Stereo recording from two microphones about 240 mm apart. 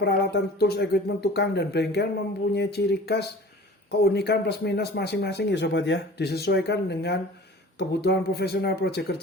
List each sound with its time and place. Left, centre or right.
0.0 s speech: left